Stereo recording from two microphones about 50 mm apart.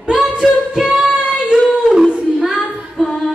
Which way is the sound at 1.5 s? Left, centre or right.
Centre.